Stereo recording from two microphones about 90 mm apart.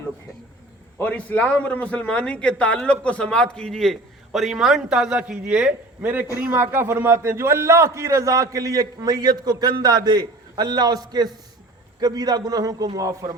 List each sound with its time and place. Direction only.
1.0 s a man's voice: 15° left (ahead or behind); by 12.9 s 45° right (ahead or behind)